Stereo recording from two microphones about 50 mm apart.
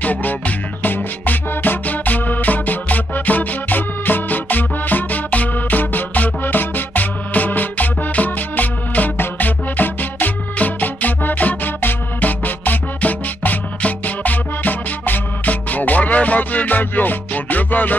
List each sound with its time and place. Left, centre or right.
0.0 s music: left